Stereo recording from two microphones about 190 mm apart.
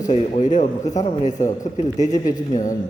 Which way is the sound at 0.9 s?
40° left (ahead or behind).